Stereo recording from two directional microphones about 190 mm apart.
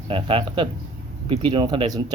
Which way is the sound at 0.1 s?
30° right (ahead or behind).